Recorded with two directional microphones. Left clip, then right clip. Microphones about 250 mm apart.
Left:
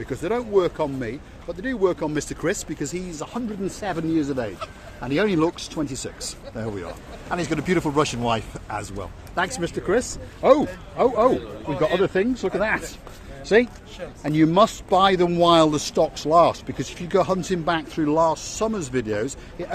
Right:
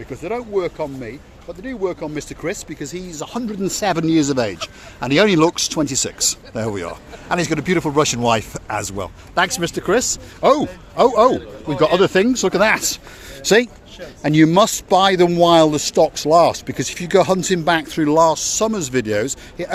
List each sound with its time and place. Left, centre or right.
0.0 s speech: centre
3.3 s a man's voice: right
15.3 s a man's voice: right